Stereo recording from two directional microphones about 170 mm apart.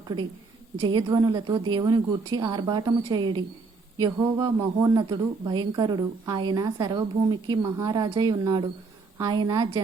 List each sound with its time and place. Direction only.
0.9 s a woman's voice: 25° right (ahead or behind)